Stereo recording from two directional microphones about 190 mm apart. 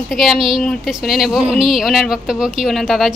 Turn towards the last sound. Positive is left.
turn(degrees=0)  # may be behind; listen again after turning